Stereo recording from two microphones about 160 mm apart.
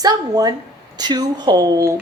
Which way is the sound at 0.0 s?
25° right (ahead or behind).